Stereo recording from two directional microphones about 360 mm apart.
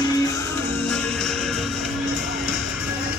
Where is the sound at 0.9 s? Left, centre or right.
Centre.